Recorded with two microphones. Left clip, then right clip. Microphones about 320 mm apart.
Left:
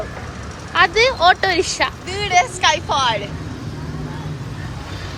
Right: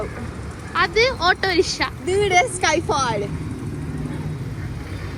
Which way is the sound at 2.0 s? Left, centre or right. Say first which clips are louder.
Right 1 dB; right.